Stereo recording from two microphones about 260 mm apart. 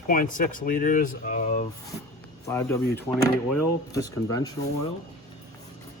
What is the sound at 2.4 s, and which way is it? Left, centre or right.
Speech, centre.